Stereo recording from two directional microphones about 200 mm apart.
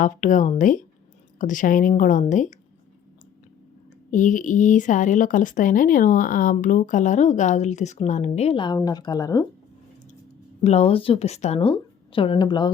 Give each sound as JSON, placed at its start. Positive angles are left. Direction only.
{"t": 0.0, "sound": "a woman's voice", "side_deg": 40}
{"t": 4.1, "sound": "a woman's voice", "side_deg": 40}
{"t": 10.6, "sound": "a woman's voice", "side_deg": 35}